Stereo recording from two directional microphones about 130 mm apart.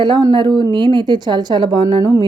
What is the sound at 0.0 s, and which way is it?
Speech, 35° right (ahead or behind).